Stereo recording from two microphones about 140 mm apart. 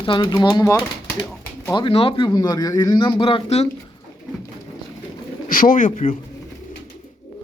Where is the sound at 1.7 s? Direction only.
40° left (ahead or behind).